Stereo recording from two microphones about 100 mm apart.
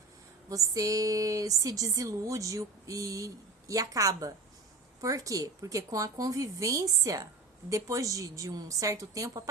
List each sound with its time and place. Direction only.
0.5 s speech: 35° right (ahead or behind)